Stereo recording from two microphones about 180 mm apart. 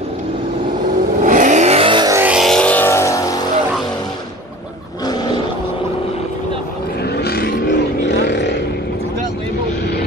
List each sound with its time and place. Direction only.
1.2 s vehicle: 45° right (ahead or behind); by 2.1 s 25° right (ahead or behind)
2.1 s vehicle: 5° right (ahead or behind); by 3.3 s 15° left (ahead or behind)
7.2 s vehicle: 60° left (ahead or behind)